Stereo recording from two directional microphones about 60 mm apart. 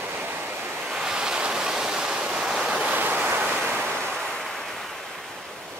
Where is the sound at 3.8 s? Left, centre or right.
Right.